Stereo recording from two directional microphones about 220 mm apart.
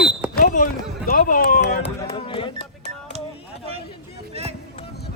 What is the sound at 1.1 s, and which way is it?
Speech, 40° left (ahead or behind).